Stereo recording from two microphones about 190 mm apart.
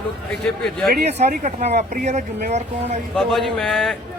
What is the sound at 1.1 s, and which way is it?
Speech, 35° right (ahead or behind).